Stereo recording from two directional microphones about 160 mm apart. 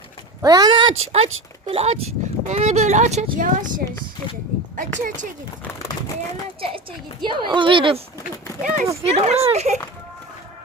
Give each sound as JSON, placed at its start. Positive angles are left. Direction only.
{"t": 0.4, "sound": "a sound", "side_deg": -25}
{"t": 1.1, "sound": "speech", "side_deg": -40}
{"t": 6.6, "sound": "speech", "side_deg": -30}
{"t": 8.6, "sound": "speech", "side_deg": -50}